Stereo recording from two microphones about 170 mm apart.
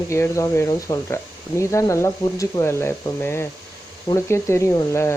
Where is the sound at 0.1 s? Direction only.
15° left (ahead or behind).